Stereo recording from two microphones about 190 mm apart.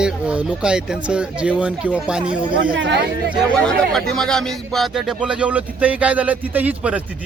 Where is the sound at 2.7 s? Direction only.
70° right (ahead or behind).